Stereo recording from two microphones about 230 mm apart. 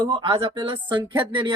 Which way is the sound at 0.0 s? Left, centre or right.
Right.